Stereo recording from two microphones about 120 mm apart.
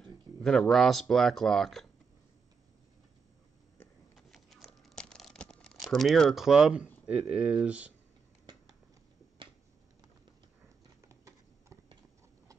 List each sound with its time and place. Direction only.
0.0 s speech: 5° left (ahead or behind)
4.1 s crumpling: centre (ahead or behind)
7.1 s speech: 10° right (ahead or behind)
11.0 s a sound: 25° right (ahead or behind)